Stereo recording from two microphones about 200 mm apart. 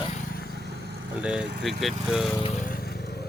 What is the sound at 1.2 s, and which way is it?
Speech, 5° right (ahead or behind).